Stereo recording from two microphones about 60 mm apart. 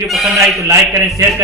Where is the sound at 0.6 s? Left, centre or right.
Right.